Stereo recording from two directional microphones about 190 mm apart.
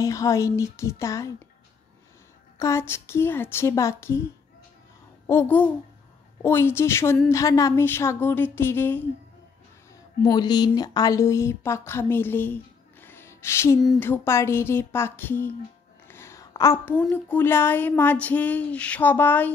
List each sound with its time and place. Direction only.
0.0 s a woman's voice: 15° left (ahead or behind)
2.6 s a woman's voice: 15° left (ahead or behind)
5.2 s a woman's voice: 10° left (ahead or behind)
10.2 s a woman's voice: 20° left (ahead or behind)
13.0 s music: 10° left (ahead or behind)
13.9 s a woman's voice: 10° left (ahead or behind)